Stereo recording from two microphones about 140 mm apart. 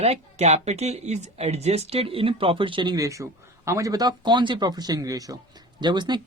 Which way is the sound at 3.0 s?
20° right (ahead or behind).